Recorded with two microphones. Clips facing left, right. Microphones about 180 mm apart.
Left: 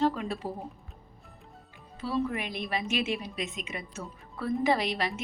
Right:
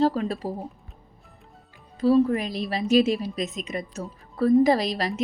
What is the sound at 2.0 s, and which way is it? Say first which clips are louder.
A woman's voice: right 11 dB; 40° right (ahead or behind).